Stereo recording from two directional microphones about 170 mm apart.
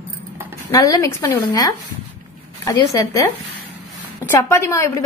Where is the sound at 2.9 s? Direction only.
20° left (ahead or behind).